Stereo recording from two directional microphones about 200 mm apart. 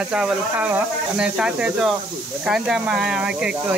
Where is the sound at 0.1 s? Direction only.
5° right (ahead or behind).